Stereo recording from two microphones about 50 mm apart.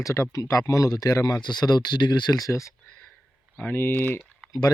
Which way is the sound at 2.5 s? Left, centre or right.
Left.